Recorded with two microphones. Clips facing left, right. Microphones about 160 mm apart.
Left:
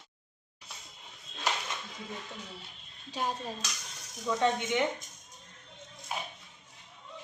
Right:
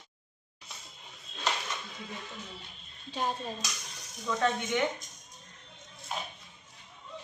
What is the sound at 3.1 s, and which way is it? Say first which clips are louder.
Speech: right 1 dB; 10° left (ahead or behind).